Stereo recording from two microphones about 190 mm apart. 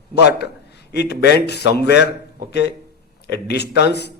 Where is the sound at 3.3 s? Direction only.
60° left (ahead or behind).